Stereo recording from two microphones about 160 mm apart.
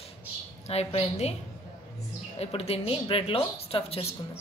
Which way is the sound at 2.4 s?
40° left (ahead or behind).